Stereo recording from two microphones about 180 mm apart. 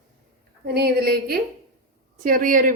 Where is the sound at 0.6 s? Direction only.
60° right (ahead or behind).